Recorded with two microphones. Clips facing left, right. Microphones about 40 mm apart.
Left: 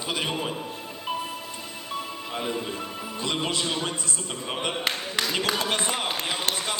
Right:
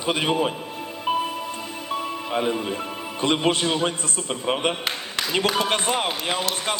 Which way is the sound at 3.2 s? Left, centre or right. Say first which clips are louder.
Right 7 dB; right.